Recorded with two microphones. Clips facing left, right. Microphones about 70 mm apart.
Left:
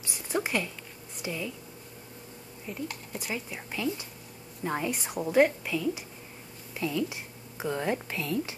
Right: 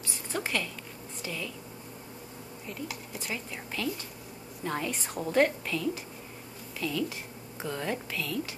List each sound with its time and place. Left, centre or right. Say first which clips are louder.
0.3 s a woman's voice: left 3 dB; centre
3.2 s a woman's voice: left 3 dB; centre